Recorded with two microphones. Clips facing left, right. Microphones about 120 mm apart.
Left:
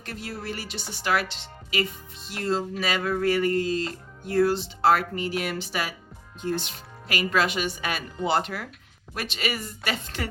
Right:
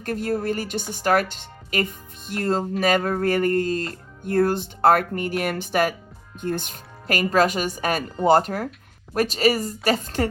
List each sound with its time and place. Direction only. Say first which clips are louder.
0.0 s a woman's voice: right 11 dB; 45° right (ahead or behind)